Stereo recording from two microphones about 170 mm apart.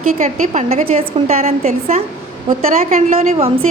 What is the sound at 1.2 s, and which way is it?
A woman's voice, 40° right (ahead or behind).